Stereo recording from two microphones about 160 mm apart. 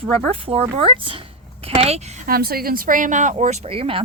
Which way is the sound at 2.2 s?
70° right (ahead or behind).